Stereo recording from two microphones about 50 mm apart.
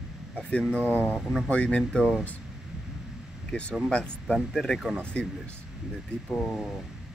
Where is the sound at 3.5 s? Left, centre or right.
Left.